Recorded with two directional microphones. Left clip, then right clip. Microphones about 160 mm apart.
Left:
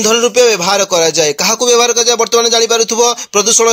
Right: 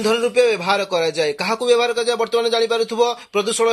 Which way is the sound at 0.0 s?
40° left (ahead or behind).